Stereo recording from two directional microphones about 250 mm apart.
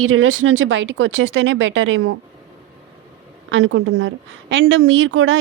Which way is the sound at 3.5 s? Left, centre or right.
Right.